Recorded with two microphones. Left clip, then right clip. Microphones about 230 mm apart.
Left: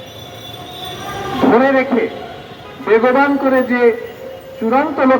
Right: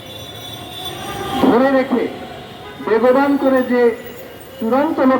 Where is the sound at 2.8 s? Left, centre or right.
Left.